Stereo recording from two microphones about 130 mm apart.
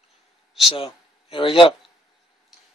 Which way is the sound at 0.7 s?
40° left (ahead or behind).